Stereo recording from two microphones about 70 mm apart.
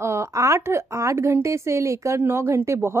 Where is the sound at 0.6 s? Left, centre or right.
Right.